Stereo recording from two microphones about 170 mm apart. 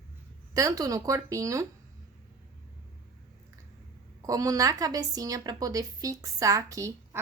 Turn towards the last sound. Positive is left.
turn(degrees=-20)  # may be behind; listen again after turning